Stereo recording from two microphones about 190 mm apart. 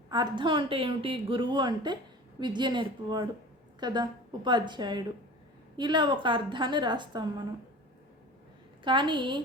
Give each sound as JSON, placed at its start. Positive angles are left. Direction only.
{"t": 0.1, "sound": "a woman's voice", "side_deg": -25}
{"t": 8.8, "sound": "a woman's voice", "side_deg": -25}